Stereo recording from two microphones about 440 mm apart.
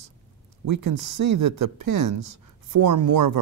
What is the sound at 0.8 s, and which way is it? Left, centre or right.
Speech, right.